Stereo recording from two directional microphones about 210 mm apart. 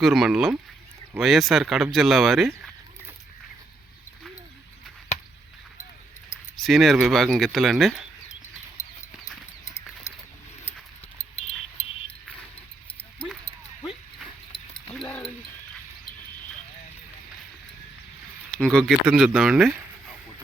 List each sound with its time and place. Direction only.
0.0 s speech: centre (ahead or behind)
6.6 s speech: centre (ahead or behind)
9.6 s horse: 15° left (ahead or behind)
11.3 s clock: 30° left (ahead or behind)
14.9 s a sound: 5° left (ahead or behind)
18.5 s speech: 5° left (ahead or behind)
19.0 s speech: 5° right (ahead or behind)